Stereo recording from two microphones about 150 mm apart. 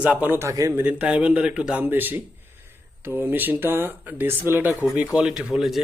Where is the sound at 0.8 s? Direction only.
10° right (ahead or behind).